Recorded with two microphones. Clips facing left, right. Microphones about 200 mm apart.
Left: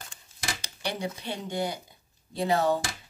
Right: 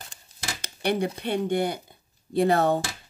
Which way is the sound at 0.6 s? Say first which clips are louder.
Right 9 dB; 55° right (ahead or behind).